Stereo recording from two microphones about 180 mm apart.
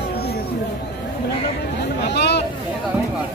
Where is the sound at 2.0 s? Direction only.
65° left (ahead or behind).